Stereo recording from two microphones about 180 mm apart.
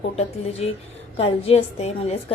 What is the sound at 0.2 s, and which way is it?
Speech, 35° left (ahead or behind).